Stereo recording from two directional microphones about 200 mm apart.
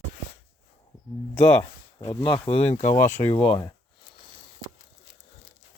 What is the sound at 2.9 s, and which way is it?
Speech, 10° left (ahead or behind).